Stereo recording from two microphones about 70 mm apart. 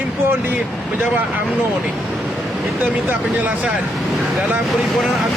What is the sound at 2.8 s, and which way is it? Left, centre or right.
Speech, right.